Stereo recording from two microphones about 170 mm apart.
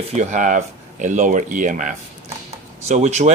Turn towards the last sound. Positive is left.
turn(degrees=-45)  # may be behind; listen again after turning